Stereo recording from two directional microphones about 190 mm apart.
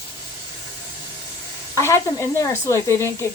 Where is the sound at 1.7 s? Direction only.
15° left (ahead or behind).